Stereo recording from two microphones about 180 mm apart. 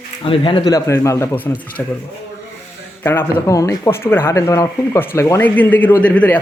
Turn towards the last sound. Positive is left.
turn(degrees=10)  # may be behind; listen again after turning